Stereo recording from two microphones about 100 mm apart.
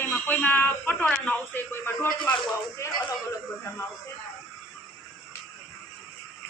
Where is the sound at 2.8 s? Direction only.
30° left (ahead or behind).